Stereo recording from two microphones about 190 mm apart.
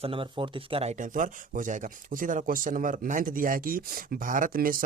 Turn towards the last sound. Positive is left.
turn(degrees=-50)  # may be behind; listen again after turning